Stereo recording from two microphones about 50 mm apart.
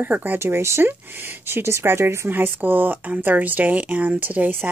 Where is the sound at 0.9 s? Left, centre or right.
Right.